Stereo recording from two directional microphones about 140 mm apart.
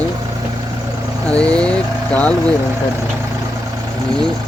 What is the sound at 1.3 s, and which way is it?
Speech, 10° left (ahead or behind).